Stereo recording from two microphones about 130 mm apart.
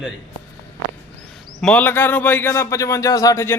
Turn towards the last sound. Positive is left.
turn(degrees=25)  # may be behind; listen again after turning